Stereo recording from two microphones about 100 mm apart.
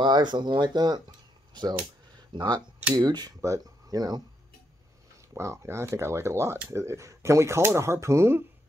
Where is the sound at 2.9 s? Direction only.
45° right (ahead or behind).